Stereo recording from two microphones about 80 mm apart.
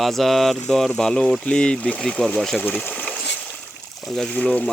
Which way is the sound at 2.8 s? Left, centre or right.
Left.